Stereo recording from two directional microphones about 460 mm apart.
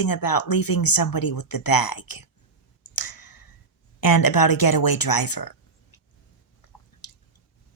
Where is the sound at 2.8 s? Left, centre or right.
Left.